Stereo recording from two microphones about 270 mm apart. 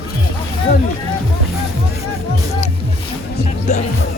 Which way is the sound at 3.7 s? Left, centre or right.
Left.